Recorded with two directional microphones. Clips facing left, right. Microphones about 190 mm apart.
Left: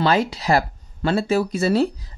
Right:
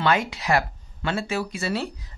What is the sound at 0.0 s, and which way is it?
Speech, 35° left (ahead or behind).